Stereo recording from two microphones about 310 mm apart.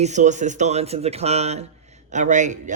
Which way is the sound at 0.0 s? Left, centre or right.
Right.